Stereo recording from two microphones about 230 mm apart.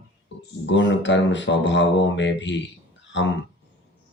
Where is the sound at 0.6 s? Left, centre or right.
Left.